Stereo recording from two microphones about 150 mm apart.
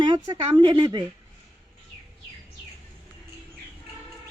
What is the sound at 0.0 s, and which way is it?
Speech, 25° right (ahead or behind).